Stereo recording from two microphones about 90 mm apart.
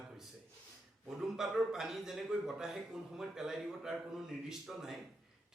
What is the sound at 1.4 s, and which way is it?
A man's voice, 5° right (ahead or behind).